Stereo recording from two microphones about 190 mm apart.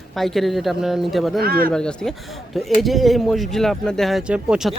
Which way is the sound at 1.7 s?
5° left (ahead or behind).